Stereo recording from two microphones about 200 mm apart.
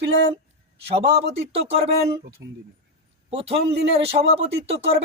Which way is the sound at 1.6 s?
30° right (ahead or behind).